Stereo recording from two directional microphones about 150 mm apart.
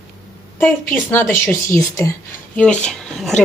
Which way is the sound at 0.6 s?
15° left (ahead or behind).